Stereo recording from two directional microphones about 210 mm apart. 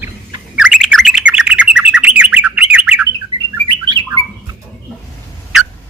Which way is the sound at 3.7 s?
20° right (ahead or behind).